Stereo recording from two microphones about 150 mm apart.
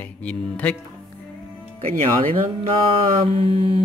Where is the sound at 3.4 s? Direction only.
40° right (ahead or behind).